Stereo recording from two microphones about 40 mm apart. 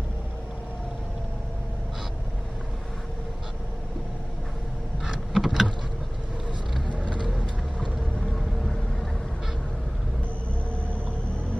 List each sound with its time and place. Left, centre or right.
5.0 s power windows: centre
6.9 s vehicle: right
7.3 s vehicle: left